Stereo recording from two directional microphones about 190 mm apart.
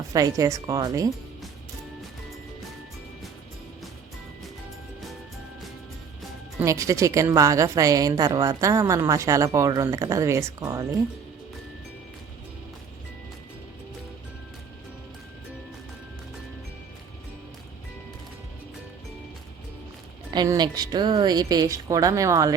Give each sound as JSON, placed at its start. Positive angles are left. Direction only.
{"t": 0.1, "sound": "speech", "side_deg": -20}
{"t": 6.6, "sound": "a woman's voice", "side_deg": -15}
{"t": 20.3, "sound": "speech", "side_deg": -20}